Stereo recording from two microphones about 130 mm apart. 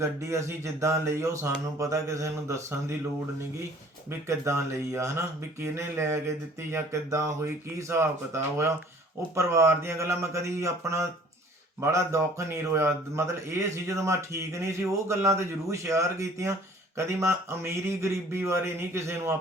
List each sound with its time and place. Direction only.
0.0 s a man's voice: 20° right (ahead or behind)
4.3 s a man's voice: 20° right (ahead or behind)